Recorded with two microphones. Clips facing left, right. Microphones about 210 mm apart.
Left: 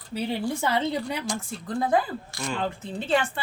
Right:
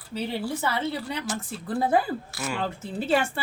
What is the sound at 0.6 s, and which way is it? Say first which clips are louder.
Speech: left 2 dB; 15° left (ahead or behind).